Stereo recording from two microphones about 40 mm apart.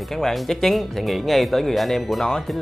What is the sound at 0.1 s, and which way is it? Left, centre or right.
Speech, centre.